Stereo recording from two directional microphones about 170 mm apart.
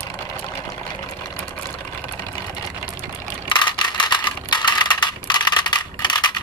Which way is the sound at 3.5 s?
25° left (ahead or behind).